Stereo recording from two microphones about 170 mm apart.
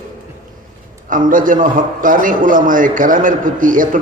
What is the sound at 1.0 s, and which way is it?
A man's voice, 50° right (ahead or behind).